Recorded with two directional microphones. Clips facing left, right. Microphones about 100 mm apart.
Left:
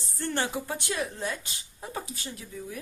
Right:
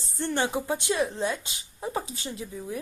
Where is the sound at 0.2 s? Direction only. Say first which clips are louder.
Right 3 dB; 20° right (ahead or behind).